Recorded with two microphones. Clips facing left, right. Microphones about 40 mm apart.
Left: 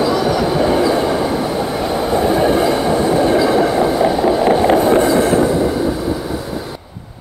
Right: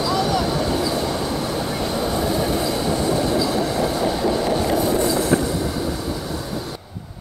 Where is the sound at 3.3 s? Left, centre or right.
Left.